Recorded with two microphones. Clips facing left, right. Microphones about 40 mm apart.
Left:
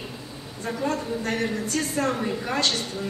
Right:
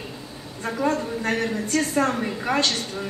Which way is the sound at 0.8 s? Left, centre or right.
Right.